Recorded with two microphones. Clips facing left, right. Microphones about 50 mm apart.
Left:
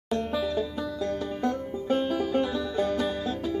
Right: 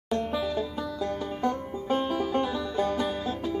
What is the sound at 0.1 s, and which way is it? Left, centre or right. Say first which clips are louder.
Music: left 1 dB; centre.